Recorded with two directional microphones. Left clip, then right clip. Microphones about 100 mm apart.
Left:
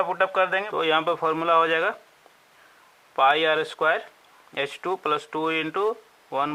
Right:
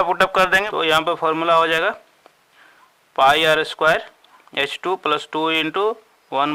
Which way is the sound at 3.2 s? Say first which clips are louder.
Right 5 dB; 25° right (ahead or behind).